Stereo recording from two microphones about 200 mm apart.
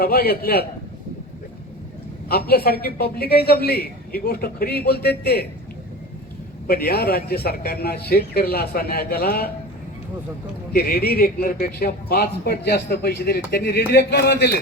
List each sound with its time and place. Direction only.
0.0 s a man's voice: 50° left (ahead or behind)
2.3 s a man's voice: 50° left (ahead or behind)
6.7 s a man's voice: 50° left (ahead or behind)
10.7 s a man's voice: 50° left (ahead or behind)